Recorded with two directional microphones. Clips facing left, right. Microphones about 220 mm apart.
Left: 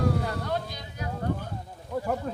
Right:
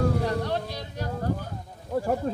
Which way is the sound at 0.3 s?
30° right (ahead or behind).